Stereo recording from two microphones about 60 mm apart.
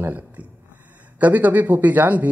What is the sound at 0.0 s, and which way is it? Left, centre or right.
Speech, right.